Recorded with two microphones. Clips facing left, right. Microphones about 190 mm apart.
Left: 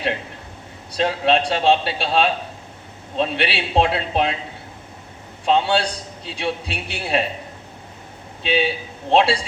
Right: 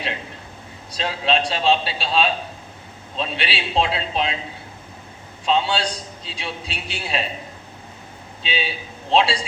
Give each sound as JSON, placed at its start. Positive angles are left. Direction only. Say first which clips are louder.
{"t": 0.9, "sound": "a man's voice", "louder": "left 4 dB", "side_deg": 60}
{"t": 5.5, "sound": "a man's voice", "louder": "left 3 dB", "side_deg": 60}
{"t": 8.4, "sound": "a man's voice", "louder": "left 7 dB", "side_deg": 60}